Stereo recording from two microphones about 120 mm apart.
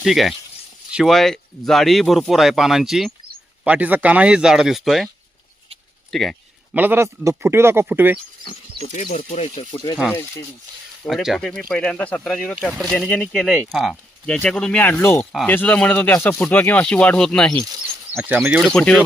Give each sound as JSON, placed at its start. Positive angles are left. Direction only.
{"t": 0.0, "sound": "speech", "side_deg": 0}
{"t": 6.1, "sound": "speech", "side_deg": 0}
{"t": 6.7, "sound": "speech", "side_deg": -15}
{"t": 8.9, "sound": "speech", "side_deg": 80}
{"t": 9.7, "sound": "speech", "side_deg": 40}
{"t": 10.1, "sound": "speech", "side_deg": 20}
{"t": 11.0, "sound": "speech", "side_deg": 0}
{"t": 15.2, "sound": "speech", "side_deg": 0}
{"t": 15.4, "sound": "speech", "side_deg": 15}
{"t": 18.2, "sound": "speech", "side_deg": -15}
{"t": 18.6, "sound": "speech", "side_deg": 5}